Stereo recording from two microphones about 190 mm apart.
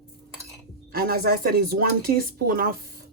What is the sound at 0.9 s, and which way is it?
Speech, 50° right (ahead or behind).